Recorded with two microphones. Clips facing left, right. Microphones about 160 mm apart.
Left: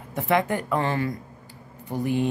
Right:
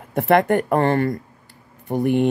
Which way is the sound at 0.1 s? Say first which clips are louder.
Right 7 dB; 55° right (ahead or behind).